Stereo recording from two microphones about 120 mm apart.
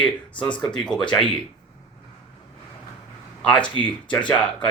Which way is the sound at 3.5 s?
10° left (ahead or behind).